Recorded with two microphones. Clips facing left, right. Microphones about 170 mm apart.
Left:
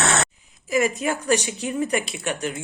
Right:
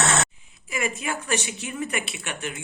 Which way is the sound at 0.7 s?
40° left (ahead or behind).